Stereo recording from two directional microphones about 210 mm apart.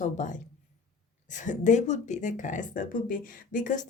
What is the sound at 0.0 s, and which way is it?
A woman's voice, 35° left (ahead or behind).